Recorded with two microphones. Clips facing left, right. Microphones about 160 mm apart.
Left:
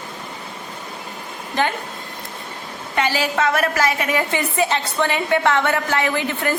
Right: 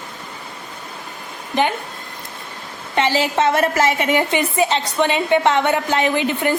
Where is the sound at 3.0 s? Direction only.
25° right (ahead or behind).